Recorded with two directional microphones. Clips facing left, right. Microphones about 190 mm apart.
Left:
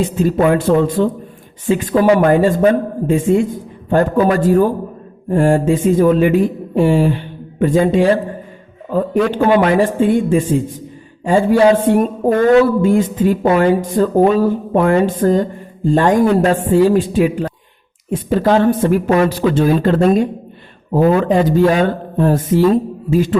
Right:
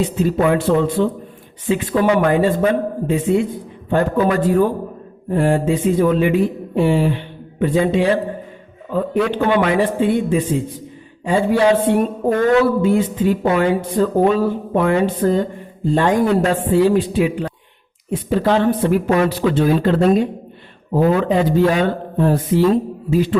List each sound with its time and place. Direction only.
0.2 s a man's voice: 45° left (ahead or behind)